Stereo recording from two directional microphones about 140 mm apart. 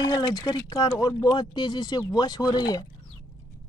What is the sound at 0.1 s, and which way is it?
Speech, 30° left (ahead or behind).